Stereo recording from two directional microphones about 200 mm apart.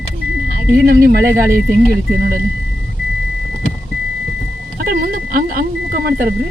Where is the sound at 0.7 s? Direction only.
50° right (ahead or behind).